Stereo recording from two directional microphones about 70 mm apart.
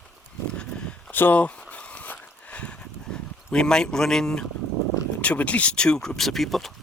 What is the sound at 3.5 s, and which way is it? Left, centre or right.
Speech, centre.